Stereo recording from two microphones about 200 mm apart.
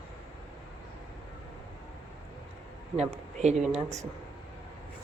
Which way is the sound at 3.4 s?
35° right (ahead or behind).